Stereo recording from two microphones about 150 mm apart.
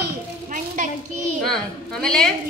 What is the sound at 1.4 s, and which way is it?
Speech, 5° left (ahead or behind).